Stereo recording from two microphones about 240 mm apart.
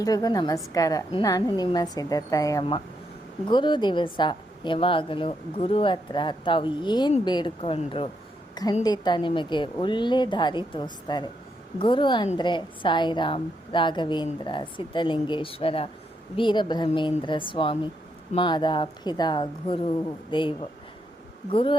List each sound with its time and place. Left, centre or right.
0.0 s a woman's voice: centre